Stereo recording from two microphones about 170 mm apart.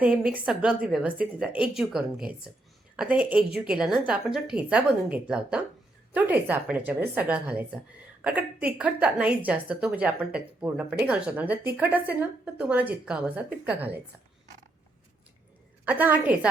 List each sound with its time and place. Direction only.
0.0 s a woman's voice: 10° right (ahead or behind)
15.8 s a woman's voice: 10° right (ahead or behind)